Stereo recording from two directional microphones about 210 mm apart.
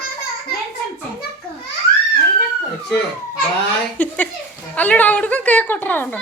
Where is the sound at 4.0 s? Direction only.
10° left (ahead or behind).